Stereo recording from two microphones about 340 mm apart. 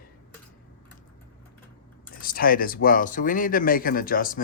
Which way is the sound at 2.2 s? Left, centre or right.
Left.